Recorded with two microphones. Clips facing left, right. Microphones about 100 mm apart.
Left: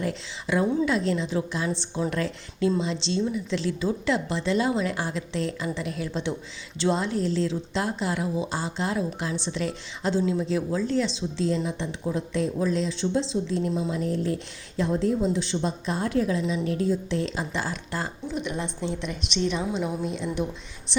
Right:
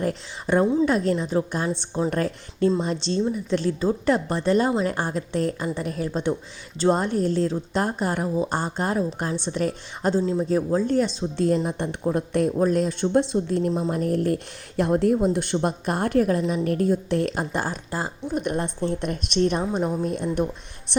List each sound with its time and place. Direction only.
0.0 s a woman's voice: 40° right (ahead or behind)